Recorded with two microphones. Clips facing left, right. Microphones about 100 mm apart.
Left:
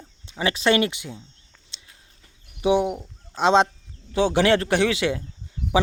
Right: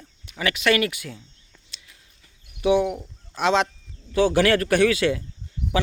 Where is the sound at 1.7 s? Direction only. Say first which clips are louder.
Right 1 dB; 25° left (ahead or behind).